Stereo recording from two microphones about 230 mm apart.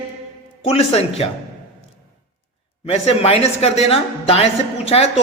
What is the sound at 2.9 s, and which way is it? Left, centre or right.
A man's voice, left.